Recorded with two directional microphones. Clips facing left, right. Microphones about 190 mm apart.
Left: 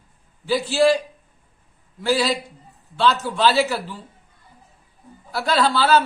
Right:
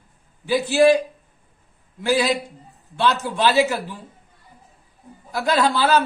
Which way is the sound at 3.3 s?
15° right (ahead or behind).